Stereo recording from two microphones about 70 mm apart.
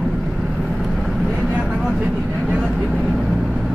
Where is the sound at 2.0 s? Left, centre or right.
Centre.